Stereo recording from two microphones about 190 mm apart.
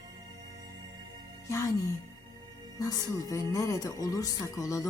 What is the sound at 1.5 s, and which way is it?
Speech, 15° left (ahead or behind).